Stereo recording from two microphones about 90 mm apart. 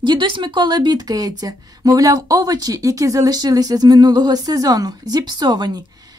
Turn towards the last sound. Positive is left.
turn(degrees=-50)  # may be behind; listen again after turning